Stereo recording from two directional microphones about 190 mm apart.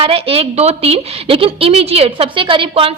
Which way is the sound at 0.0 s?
30° right (ahead or behind).